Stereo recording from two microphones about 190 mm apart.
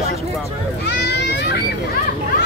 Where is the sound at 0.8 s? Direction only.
65° left (ahead or behind).